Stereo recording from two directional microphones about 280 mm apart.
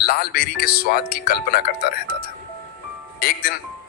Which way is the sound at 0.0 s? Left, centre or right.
Left.